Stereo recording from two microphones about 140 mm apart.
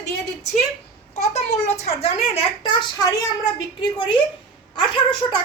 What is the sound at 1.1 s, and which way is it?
Speech, 50° left (ahead or behind).